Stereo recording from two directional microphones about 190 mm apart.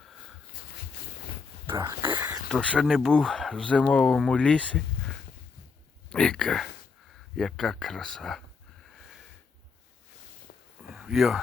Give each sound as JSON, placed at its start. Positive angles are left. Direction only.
{"t": 1.6, "sound": "speech", "side_deg": -25}
{"t": 2.5, "sound": "speech", "side_deg": 5}
{"t": 6.1, "sound": "speech", "side_deg": 5}
{"t": 10.8, "sound": "a sound", "side_deg": -5}